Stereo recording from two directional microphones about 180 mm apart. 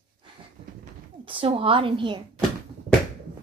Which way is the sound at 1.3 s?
30° right (ahead or behind).